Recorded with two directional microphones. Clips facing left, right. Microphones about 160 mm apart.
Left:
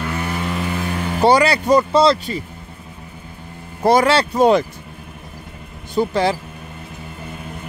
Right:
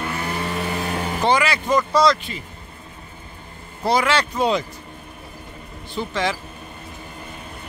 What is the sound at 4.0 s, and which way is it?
Speech, 30° left (ahead or behind).